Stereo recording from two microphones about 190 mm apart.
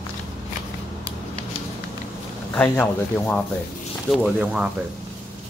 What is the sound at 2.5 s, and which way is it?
Speech, 10° left (ahead or behind).